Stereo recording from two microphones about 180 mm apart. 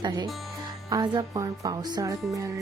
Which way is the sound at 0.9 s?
20° right (ahead or behind).